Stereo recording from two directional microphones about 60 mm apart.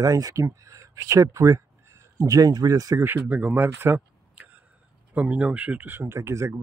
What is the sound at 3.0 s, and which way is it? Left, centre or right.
Speech, right.